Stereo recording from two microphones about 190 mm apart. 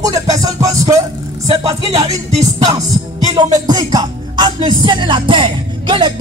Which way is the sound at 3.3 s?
20° right (ahead or behind).